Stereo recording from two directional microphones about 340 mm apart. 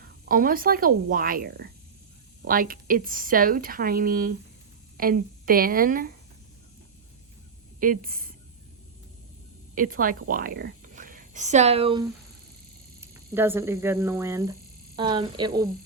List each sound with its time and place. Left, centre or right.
0.3 s speech: right
7.8 s speech: right
9.7 s a woman's voice: right